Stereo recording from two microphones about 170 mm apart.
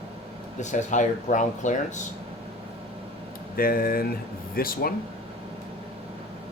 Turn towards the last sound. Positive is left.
turn(degrees=60)  # may be behind; listen again after turning